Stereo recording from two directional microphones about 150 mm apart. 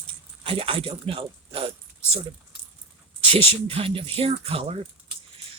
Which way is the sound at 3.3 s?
40° right (ahead or behind).